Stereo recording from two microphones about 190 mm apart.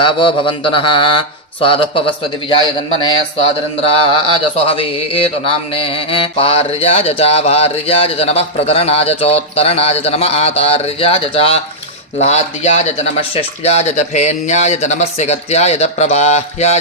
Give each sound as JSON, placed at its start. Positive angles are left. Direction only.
{"t": 0.0, "sound": "mantra", "side_deg": 25}
{"t": 3.9, "sound": "speech", "side_deg": 25}